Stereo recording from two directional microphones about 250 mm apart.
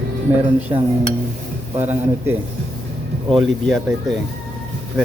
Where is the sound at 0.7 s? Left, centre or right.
Centre.